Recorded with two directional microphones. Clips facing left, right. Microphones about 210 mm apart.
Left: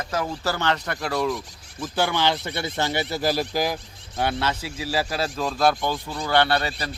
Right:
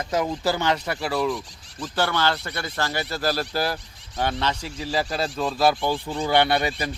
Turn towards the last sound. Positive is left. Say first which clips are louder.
# right 1 dB
turn(degrees=-15)  # may be behind; listen again after turning